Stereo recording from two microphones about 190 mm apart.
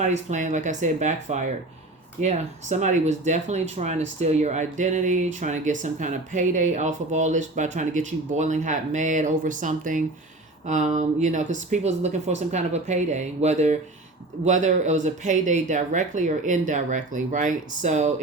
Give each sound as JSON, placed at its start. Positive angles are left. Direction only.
{"t": 0.0, "sound": "speech", "side_deg": -40}